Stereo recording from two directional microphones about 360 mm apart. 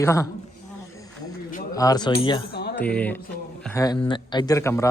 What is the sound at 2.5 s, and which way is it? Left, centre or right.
Music, left.